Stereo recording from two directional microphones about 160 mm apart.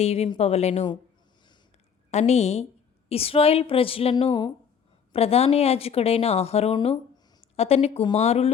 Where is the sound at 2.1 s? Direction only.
45° left (ahead or behind).